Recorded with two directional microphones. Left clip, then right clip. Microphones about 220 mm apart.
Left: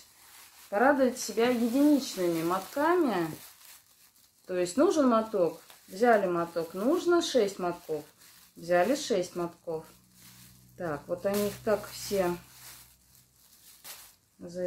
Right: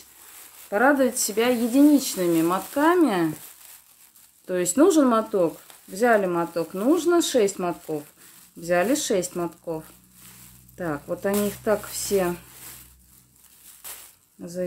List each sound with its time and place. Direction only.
0.7 s speech: 50° right (ahead or behind)
4.5 s speech: 50° right (ahead or behind)
10.8 s speech: 45° right (ahead or behind)